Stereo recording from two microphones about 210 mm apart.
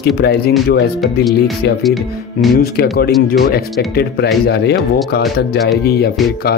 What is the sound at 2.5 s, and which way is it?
Speech, 45° left (ahead or behind).